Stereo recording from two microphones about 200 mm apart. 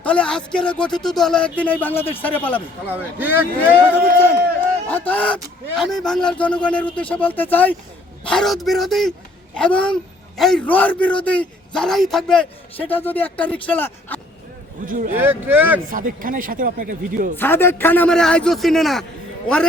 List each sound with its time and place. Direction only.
0.0 s a man's voice: 5° left (ahead or behind)
2.8 s speech: 10° right (ahead or behind)
4.9 s a man's voice: 10° left (ahead or behind)
14.8 s speech: 40° right (ahead or behind)
15.1 s speech: 10° right (ahead or behind)
15.9 s speech: 40° right (ahead or behind)
17.3 s a man's voice: 10° left (ahead or behind)